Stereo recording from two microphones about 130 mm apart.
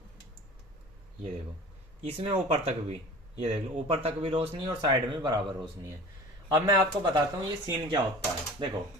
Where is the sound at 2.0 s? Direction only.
45° right (ahead or behind).